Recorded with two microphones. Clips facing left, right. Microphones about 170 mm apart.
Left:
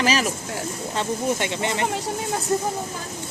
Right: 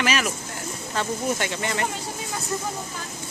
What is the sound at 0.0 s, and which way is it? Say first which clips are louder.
Speech: left 3 dB; 30° left (ahead or behind).